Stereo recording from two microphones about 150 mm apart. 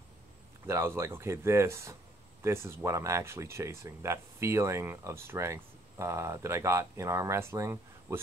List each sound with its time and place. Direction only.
0.7 s speech: 15° right (ahead or behind)